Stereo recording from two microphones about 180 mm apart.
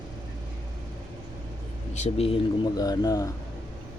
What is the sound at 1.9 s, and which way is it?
Speech, 35° left (ahead or behind).